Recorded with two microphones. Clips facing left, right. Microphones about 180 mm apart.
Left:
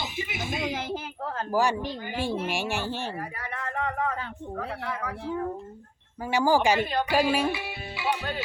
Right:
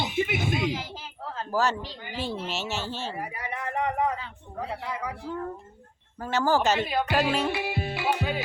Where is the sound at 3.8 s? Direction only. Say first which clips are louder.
Right 3 dB; 15° right (ahead or behind).